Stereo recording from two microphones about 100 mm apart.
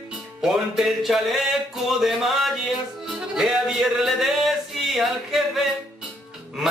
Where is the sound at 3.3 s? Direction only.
5° right (ahead or behind).